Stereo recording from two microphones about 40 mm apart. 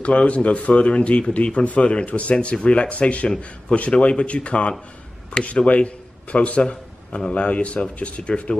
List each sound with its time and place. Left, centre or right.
0.0 s a man's voice: left